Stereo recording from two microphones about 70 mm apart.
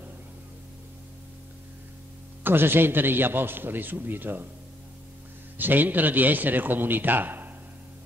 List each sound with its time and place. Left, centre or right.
2.4 s a man's voice: right
5.6 s a man's voice: right